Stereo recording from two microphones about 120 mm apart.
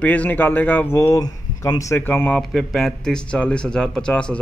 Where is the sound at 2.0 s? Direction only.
15° left (ahead or behind).